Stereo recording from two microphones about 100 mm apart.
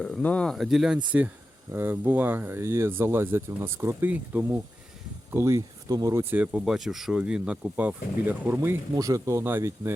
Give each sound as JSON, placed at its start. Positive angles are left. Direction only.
{"t": 0.0, "sound": "speech", "side_deg": 10}
{"t": 0.5, "sound": "speech", "side_deg": 0}
{"t": 1.7, "sound": "speech", "side_deg": -20}
{"t": 6.3, "sound": "speech", "side_deg": -15}
{"t": 9.0, "sound": "speech", "side_deg": -35}